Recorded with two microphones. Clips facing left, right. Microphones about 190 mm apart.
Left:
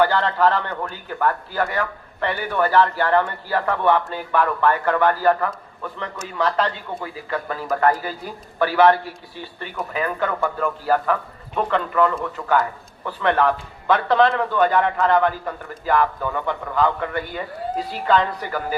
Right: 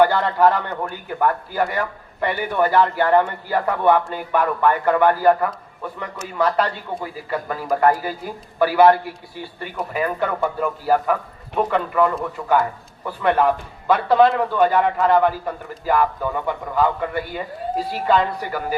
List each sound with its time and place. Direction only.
0.0 s a man's voice: 15° right (ahead or behind)